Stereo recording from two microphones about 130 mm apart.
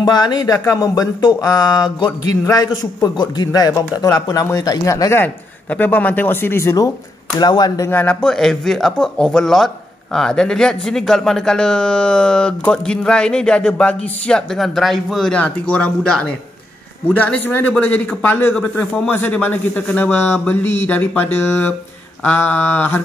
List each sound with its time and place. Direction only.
0.0 s speech: 35° left (ahead or behind)
5.2 s a man's voice: 15° left (ahead or behind)
7.3 s speech: 35° left (ahead or behind)
7.9 s a man's voice: 10° left (ahead or behind)